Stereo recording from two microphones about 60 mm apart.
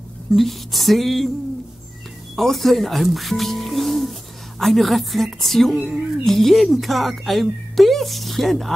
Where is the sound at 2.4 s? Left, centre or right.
Centre.